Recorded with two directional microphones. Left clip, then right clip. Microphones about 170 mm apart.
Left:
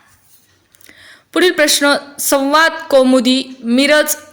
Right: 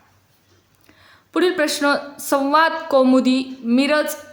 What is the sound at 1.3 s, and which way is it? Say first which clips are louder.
A man's voice: left 7 dB; 15° left (ahead or behind).